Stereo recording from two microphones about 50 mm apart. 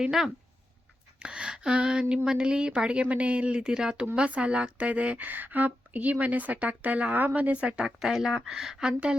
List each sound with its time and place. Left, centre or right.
0.0 s speech: centre
1.2 s a sound: centre
2.2 s a woman's voice: centre